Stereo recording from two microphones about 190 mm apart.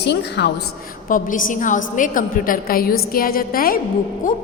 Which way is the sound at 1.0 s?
45° left (ahead or behind).